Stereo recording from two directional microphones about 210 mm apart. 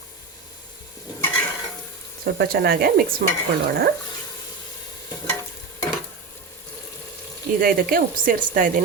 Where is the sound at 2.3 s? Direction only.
50° right (ahead or behind).